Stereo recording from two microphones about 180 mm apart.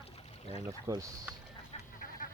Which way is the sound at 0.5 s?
20° right (ahead or behind).